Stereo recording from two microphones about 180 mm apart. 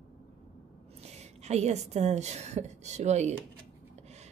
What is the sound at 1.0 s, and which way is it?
A woman's voice, 40° right (ahead or behind).